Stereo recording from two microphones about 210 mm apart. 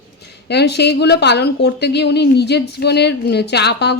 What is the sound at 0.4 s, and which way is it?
A woman's voice, 50° left (ahead or behind).